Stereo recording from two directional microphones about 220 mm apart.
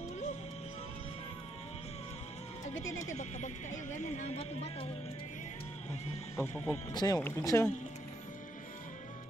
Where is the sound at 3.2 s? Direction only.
30° left (ahead or behind).